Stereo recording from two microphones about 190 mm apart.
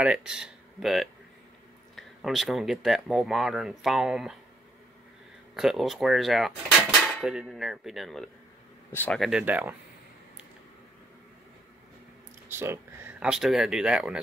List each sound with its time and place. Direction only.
0.0 s speech: 5° right (ahead or behind)
5.5 s speech: centre (ahead or behind)
12.4 s speech: 15° right (ahead or behind)